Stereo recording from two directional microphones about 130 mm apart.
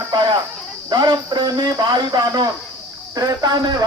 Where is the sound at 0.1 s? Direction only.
35° right (ahead or behind).